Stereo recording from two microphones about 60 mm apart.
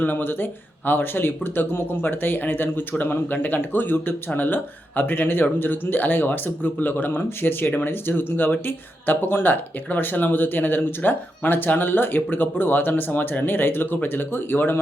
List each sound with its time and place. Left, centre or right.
0.0 s speech: left